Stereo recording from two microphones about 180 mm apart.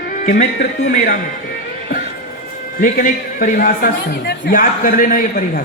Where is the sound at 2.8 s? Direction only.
50° left (ahead or behind).